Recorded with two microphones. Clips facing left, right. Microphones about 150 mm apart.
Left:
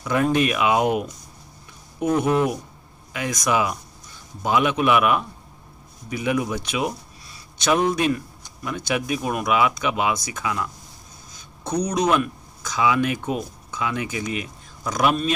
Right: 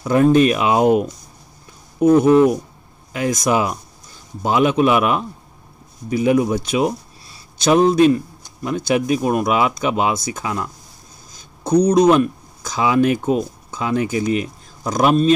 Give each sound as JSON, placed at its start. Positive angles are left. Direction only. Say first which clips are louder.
{"t": 0.0, "sound": "speech", "louder": "right 7 dB", "side_deg": -35}